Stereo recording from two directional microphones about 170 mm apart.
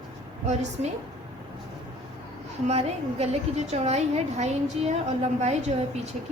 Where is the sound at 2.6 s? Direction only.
40° right (ahead or behind).